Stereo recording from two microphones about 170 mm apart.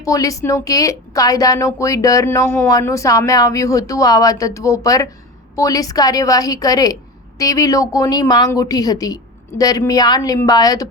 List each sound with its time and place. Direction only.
0.0 s a woman's voice: 20° left (ahead or behind)